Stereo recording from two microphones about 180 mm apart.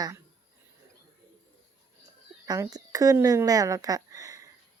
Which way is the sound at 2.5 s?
20° right (ahead or behind).